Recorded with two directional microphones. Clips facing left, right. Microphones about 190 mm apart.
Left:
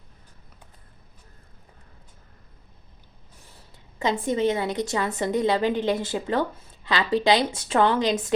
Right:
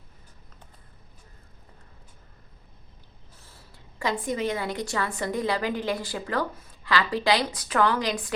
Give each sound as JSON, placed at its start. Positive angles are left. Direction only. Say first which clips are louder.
{"t": 3.4, "sound": "a woman's voice", "louder": "even", "side_deg": 20}